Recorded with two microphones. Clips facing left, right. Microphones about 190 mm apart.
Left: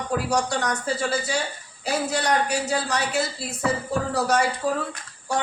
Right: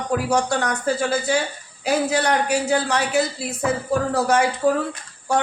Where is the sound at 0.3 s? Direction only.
55° right (ahead or behind).